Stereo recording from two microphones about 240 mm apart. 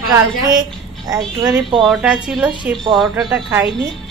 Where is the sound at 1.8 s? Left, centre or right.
Centre.